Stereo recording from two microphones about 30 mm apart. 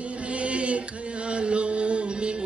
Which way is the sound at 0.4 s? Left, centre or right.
Right.